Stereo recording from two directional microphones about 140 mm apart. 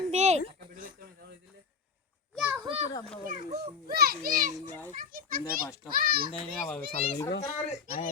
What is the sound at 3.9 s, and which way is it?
A child's voice, 90° right.